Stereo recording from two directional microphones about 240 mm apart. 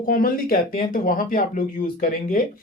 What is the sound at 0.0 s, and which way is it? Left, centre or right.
Speech, left.